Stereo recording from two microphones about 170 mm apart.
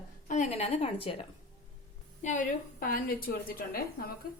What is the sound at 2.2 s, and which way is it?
A woman's voice, 50° left (ahead or behind).